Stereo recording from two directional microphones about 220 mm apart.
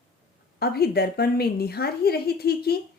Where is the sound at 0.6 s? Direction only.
45° left (ahead or behind).